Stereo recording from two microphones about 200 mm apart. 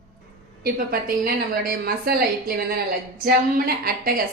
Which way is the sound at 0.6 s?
45° right (ahead or behind).